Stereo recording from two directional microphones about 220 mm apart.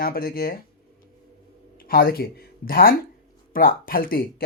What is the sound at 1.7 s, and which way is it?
Speech, 40° left (ahead or behind).